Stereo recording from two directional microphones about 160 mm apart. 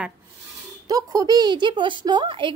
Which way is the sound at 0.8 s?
25° right (ahead or behind).